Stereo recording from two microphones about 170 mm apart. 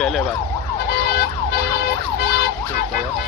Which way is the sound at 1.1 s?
65° left (ahead or behind).